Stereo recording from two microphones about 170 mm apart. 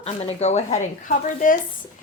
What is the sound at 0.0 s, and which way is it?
Speech, 40° left (ahead or behind).